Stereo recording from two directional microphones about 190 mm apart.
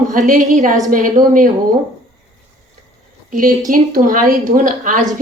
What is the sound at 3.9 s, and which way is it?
A woman's voice, 45° right (ahead or behind).